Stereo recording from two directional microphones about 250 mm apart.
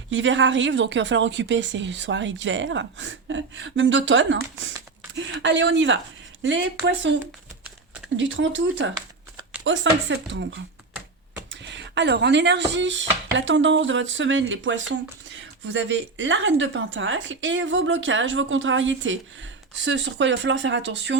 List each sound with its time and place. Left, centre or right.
0.1 s speech: right